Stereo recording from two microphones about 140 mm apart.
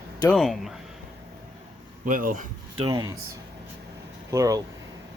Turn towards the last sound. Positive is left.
turn(degrees=-25)  # may be behind; listen again after turning